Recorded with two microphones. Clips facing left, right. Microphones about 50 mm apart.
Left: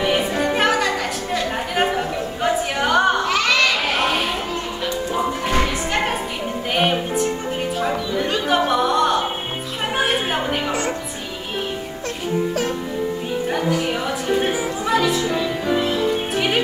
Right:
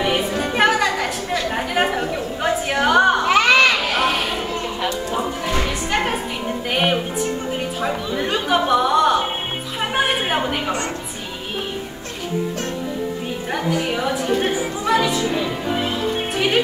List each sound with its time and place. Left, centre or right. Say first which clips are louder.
0.6 s chatter: right 4 dB; centre
3.3 s a sound: right 4 dB; right
3.9 s children playing: right 1 dB; centre
5.1 s music: left 2 dB; centre
8.5 s music: right 2 dB; centre
10.0 s a sound: even; centre
13.8 s music: right 1 dB; centre